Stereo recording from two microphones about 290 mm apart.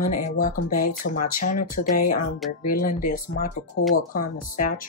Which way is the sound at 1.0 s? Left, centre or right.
Left.